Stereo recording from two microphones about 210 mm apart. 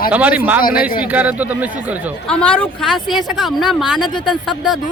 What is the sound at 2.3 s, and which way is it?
Speech, 5° left (ahead or behind).